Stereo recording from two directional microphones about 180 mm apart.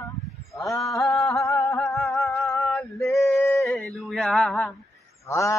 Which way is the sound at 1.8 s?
Centre (ahead or behind).